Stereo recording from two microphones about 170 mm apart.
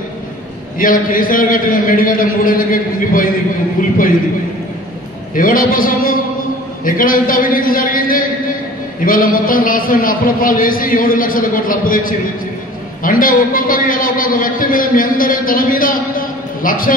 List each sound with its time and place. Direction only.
0.7 s a man's voice: 55° left (ahead or behind)
5.3 s a man's voice: 55° left (ahead or behind)